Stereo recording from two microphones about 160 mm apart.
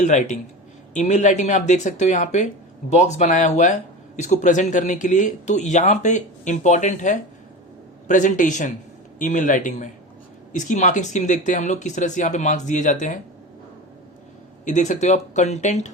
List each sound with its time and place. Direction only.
0.0 s speech: 50° left (ahead or behind)
14.6 s speech: 50° left (ahead or behind)